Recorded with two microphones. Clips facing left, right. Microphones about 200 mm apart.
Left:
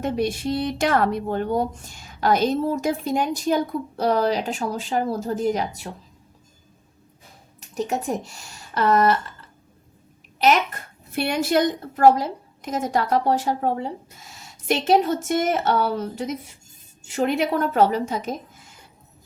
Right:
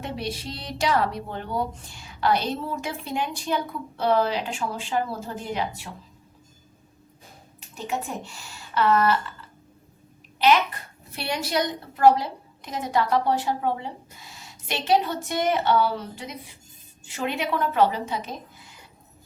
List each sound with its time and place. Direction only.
0.0 s a child's voice: 50° left (ahead or behind)
7.8 s speech: 40° left (ahead or behind)
10.4 s a child's voice: 45° left (ahead or behind)